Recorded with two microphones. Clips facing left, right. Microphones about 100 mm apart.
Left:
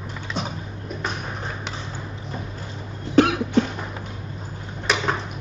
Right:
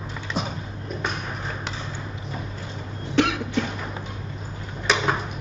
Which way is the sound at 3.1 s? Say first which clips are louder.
Left 5 dB; 40° left (ahead or behind).